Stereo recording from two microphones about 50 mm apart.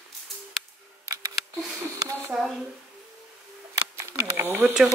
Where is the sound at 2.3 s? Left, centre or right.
Centre.